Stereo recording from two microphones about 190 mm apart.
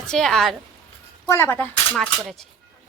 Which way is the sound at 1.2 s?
15° left (ahead or behind).